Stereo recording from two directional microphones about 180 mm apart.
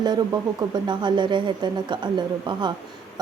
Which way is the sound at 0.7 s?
25° right (ahead or behind).